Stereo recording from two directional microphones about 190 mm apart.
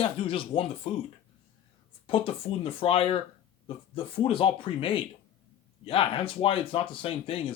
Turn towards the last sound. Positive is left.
turn(degrees=30)  # may be behind; listen again after turning